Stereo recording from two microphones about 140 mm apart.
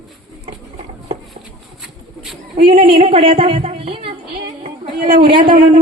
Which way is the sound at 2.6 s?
40° right (ahead or behind).